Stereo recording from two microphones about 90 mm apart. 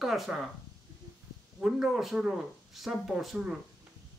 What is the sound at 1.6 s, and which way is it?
Speech, 5° right (ahead or behind).